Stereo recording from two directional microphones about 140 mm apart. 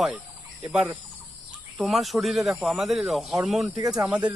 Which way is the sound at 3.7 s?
25° right (ahead or behind).